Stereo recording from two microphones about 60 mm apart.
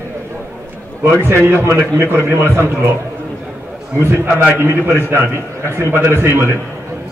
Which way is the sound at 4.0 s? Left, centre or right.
Right.